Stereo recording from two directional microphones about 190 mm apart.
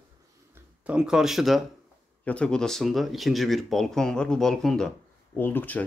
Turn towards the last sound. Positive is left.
turn(degrees=10)  # may be behind; listen again after turning